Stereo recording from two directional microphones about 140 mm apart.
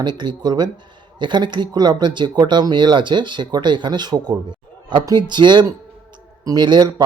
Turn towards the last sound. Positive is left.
turn(degrees=-35)  # may be behind; listen again after turning